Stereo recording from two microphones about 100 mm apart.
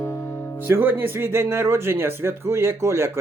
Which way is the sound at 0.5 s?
20° right (ahead or behind).